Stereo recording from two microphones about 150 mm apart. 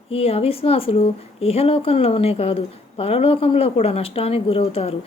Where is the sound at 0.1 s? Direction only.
40° left (ahead or behind).